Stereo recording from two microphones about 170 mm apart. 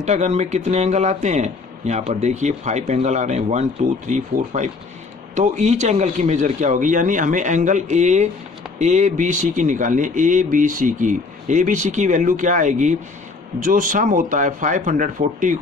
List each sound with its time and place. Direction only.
0.0 s speech: 40° right (ahead or behind)